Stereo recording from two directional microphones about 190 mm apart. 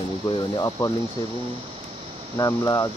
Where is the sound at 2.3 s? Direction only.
20° left (ahead or behind).